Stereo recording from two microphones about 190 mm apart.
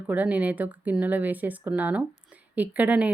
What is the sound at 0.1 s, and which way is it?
Speech, 10° right (ahead or behind).